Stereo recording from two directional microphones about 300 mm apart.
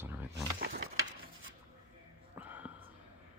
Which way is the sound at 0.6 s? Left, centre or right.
Right.